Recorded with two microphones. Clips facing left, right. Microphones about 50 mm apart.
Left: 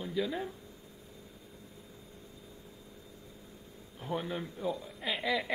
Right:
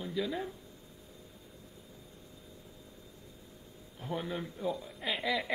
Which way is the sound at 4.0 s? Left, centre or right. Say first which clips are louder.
Left 1 dB; centre.